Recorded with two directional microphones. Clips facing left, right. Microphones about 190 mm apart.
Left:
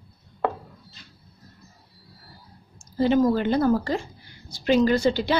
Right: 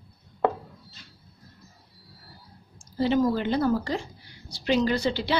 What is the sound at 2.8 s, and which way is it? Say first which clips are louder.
A woman's voice: left 3 dB; 50° left (ahead or behind).